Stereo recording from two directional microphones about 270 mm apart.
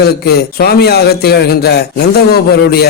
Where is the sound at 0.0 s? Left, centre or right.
Left.